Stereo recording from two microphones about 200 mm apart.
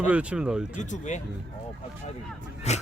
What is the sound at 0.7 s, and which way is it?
Speech, 35° left (ahead or behind).